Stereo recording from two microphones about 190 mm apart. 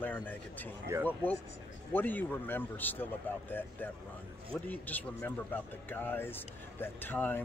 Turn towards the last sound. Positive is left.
turn(degrees=10)  # may be behind; listen again after turning